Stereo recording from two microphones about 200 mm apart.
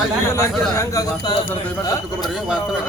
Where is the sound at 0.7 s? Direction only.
15° left (ahead or behind).